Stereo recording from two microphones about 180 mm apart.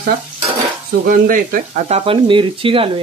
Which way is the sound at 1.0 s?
50° right (ahead or behind).